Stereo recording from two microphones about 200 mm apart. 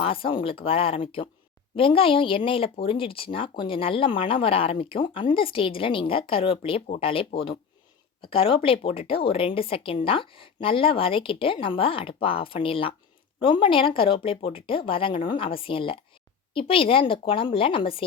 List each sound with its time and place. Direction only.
0.0 s speech: 25° left (ahead or behind)